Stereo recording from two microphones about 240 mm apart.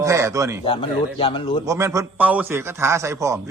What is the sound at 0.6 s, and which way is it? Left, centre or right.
Speech, left.